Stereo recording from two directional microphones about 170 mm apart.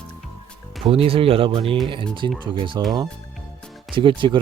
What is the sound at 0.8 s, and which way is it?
Speech, 35° right (ahead or behind).